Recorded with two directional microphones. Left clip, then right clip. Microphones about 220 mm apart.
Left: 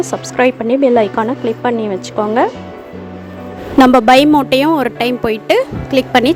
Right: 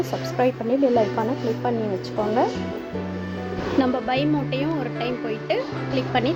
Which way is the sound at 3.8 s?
55° left (ahead or behind).